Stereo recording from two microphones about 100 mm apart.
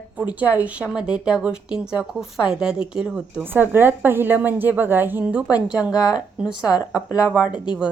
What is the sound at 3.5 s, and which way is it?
A woman's voice, 20° right (ahead or behind).